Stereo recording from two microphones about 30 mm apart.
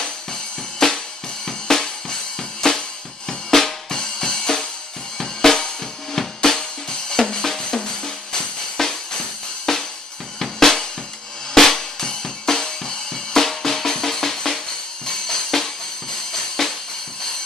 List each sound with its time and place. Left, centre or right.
0.0 s music: centre
3.3 s drum kit: centre
6.9 s drum: centre
8.0 s music: centre